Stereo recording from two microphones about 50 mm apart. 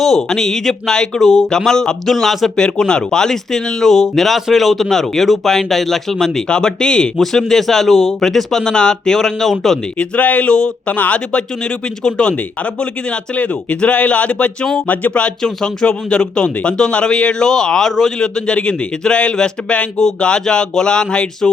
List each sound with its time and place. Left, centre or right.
0.2 s speech: centre
2.6 s speech: centre
10.0 s speech: left
15.4 s speech: centre